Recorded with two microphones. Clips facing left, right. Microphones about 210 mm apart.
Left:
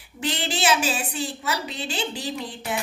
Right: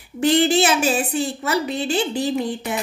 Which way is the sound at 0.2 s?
50° right (ahead or behind).